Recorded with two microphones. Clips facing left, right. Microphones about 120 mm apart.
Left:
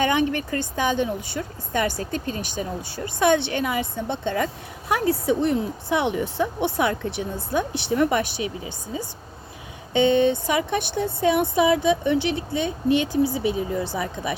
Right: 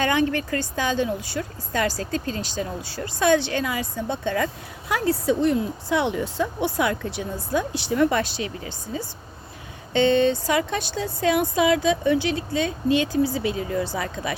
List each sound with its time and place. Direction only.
0.0 s speech: 20° left (ahead or behind)